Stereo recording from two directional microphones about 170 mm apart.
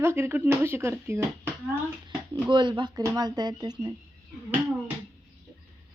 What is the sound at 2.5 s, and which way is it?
Speech, 25° right (ahead or behind).